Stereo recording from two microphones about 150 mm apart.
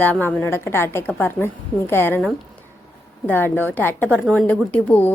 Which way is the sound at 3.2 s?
15° left (ahead or behind).